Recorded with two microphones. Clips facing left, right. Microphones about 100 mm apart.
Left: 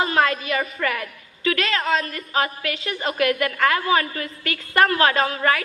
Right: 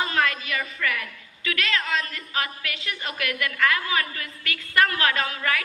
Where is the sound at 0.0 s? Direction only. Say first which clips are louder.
Left 5 dB; 30° left (ahead or behind).